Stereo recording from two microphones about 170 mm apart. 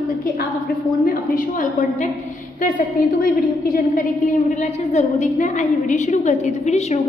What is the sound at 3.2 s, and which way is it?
A woman's voice, 50° left (ahead or behind).